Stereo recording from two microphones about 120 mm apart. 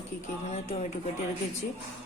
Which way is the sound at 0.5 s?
70° left (ahead or behind).